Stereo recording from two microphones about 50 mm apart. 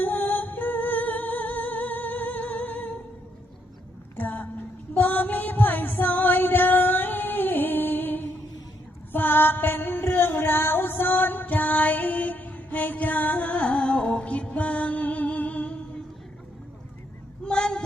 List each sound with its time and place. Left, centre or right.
0.0 s music: left
4.2 s a sound: left
4.9 s music: left
17.4 s child singing: centre